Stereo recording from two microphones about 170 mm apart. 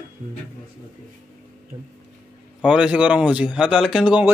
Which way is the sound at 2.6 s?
5° right (ahead or behind).